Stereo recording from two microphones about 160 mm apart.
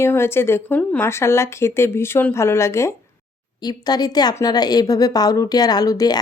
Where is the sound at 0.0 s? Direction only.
15° left (ahead or behind).